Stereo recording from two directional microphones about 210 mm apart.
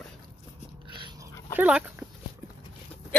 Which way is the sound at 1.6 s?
5° right (ahead or behind).